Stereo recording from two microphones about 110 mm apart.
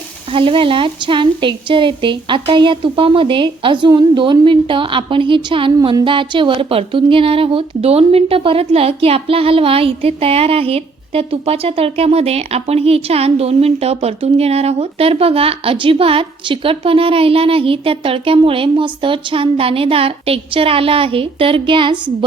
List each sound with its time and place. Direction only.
0.3 s a woman's voice: 50° right (ahead or behind)